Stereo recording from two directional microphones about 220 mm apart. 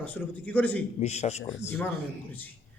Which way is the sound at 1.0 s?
30° left (ahead or behind).